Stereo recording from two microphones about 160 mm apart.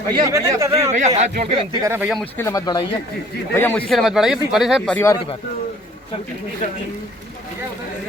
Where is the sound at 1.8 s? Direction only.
15° right (ahead or behind).